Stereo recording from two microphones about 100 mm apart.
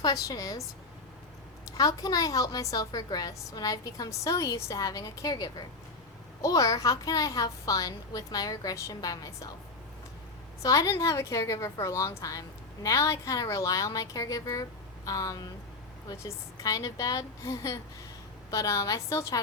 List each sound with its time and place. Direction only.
0.0 s a woman's voice: 35° left (ahead or behind)
1.7 s a woman's voice: 35° left (ahead or behind)
10.6 s a woman's voice: 30° left (ahead or behind)